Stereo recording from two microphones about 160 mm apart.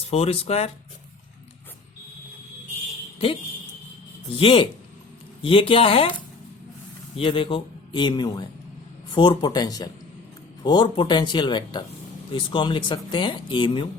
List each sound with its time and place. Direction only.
0.1 s speech: 40° left (ahead or behind)
4.4 s speech: 35° left (ahead or behind)
7.2 s speech: 35° left (ahead or behind)